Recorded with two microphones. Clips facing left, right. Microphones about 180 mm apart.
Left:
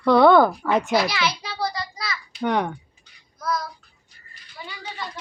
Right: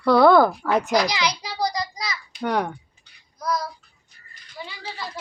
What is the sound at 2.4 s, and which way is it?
Speech, 5° right (ahead or behind).